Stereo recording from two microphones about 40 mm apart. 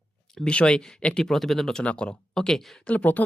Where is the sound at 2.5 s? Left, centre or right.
Centre.